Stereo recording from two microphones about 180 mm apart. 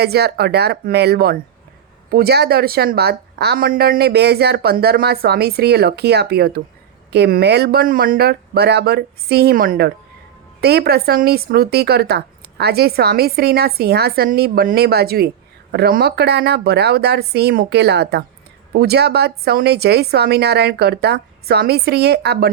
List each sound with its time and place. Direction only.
0.0 s speech: 65° right (ahead or behind)